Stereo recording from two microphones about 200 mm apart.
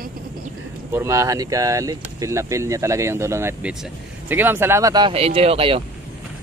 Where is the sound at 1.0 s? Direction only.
15° right (ahead or behind).